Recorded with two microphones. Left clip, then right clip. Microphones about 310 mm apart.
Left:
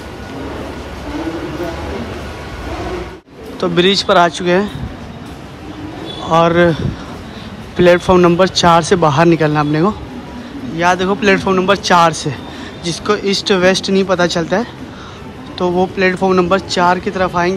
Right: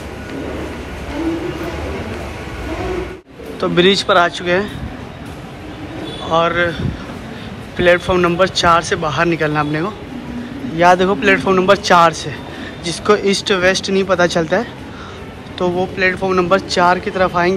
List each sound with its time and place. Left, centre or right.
3.6 s speech: centre
6.2 s speech: centre